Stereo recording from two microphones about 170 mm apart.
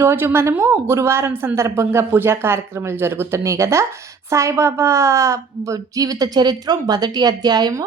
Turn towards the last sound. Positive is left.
turn(degrees=-20)  # may be behind; listen again after turning